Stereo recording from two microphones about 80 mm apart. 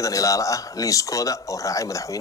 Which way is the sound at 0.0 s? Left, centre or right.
Left.